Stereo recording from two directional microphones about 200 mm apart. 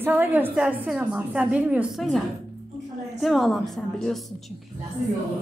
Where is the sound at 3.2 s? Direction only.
Centre (ahead or behind).